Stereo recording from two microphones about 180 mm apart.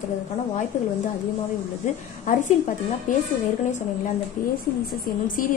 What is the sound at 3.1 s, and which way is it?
Speech, 45° left (ahead or behind).